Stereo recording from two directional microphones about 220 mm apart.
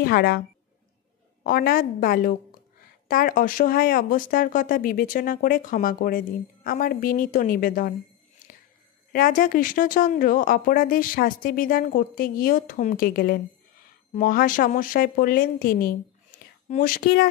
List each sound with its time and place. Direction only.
0.0 s a woman's voice: 45° left (ahead or behind)
1.4 s speech: 40° left (ahead or behind)
8.4 s music: 35° left (ahead or behind)
9.1 s speech: 40° left (ahead or behind)